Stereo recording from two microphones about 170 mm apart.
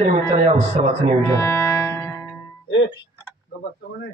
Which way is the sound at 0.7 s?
40° right (ahead or behind).